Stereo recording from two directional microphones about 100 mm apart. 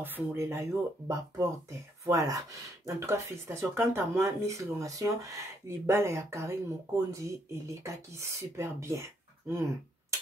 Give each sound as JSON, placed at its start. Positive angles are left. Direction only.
{"t": 0.0, "sound": "speech", "side_deg": -20}